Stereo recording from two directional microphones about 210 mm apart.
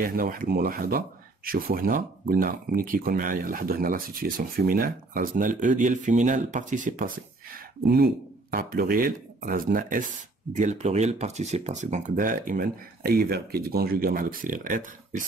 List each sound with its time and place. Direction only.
0.0 s speech: 45° right (ahead or behind)